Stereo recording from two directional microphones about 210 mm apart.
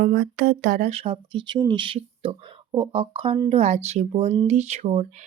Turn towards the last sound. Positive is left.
turn(degrees=-30)  # may be behind; listen again after turning